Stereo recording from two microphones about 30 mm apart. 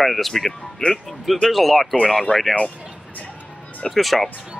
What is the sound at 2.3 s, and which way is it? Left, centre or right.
Speech, left.